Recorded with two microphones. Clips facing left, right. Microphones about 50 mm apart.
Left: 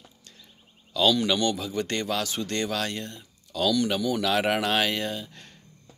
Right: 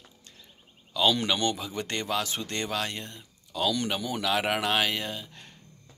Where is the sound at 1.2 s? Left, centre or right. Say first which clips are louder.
Left 3 dB; right.